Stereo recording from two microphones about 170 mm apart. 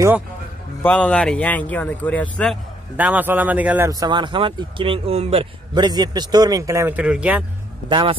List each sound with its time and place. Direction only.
0.8 s speech: 5° left (ahead or behind)
3.0 s speech: 10° right (ahead or behind)
7.9 s a man's voice: 30° right (ahead or behind)